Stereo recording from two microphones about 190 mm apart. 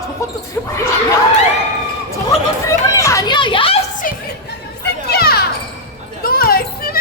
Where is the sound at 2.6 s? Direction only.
15° left (ahead or behind).